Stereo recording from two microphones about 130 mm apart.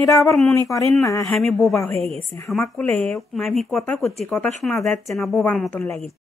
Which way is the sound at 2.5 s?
5° left (ahead or behind).